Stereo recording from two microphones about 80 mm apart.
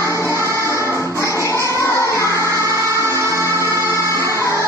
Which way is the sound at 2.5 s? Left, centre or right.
Right.